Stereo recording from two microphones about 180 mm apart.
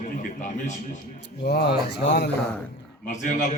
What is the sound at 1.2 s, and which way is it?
Speech, 65° left (ahead or behind).